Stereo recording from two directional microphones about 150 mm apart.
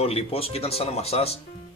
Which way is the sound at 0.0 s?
40° left (ahead or behind).